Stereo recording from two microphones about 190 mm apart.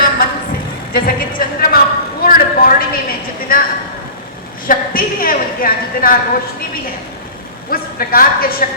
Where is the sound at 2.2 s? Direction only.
50° left (ahead or behind).